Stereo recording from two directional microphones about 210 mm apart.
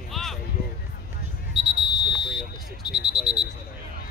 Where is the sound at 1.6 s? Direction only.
20° left (ahead or behind).